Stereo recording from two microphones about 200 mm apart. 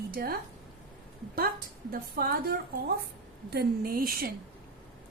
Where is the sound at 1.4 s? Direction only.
50° right (ahead or behind).